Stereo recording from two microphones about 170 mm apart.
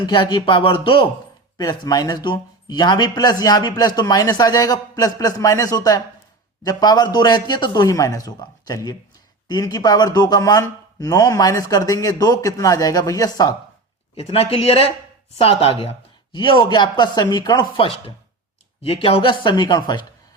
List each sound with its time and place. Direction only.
0.0 s speech: 25° left (ahead or behind)
14.2 s speech: 35° left (ahead or behind)